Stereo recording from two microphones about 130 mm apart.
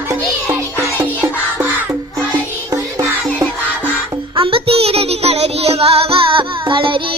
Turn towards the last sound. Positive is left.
turn(degrees=-40)  # may be behind; listen again after turning